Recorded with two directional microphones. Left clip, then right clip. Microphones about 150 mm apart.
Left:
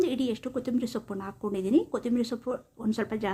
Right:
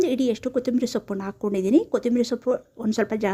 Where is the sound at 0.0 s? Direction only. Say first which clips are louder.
Right 6 dB; 35° right (ahead or behind).